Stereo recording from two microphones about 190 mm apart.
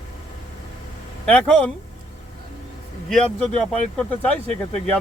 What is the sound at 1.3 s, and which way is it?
Speech, 5° left (ahead or behind).